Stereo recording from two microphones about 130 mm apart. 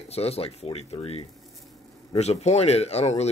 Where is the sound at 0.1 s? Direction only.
50° left (ahead or behind).